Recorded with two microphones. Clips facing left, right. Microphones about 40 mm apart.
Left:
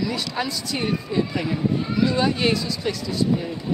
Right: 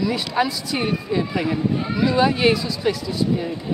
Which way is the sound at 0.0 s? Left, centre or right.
Centre.